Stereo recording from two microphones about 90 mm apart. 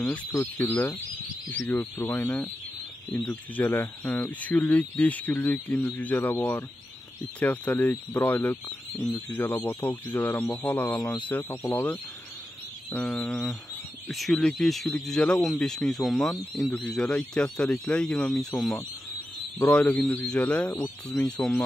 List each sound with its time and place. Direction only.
0.0 s speech: 15° left (ahead or behind)
0.3 s speech: 30° left (ahead or behind)
0.7 s speech: 20° left (ahead or behind)
7.3 s speech: 15° left (ahead or behind)
14.1 s speech: centre (ahead or behind)